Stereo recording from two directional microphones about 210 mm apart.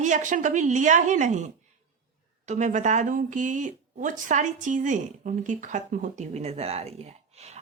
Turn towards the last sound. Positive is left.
turn(degrees=-30)  # may be behind; listen again after turning